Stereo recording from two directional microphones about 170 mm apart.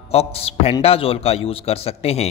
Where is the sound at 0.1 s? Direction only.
35° left (ahead or behind).